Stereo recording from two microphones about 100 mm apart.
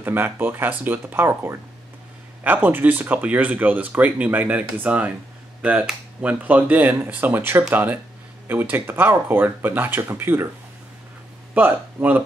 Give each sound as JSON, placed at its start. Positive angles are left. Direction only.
{"t": 0.0, "sound": "speech", "side_deg": -20}
{"t": 11.5, "sound": "speech", "side_deg": -15}